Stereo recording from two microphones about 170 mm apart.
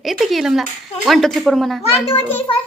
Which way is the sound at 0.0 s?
Centre (ahead or behind).